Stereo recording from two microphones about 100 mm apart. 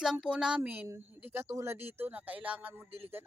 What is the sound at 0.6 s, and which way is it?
Speech, 20° right (ahead or behind).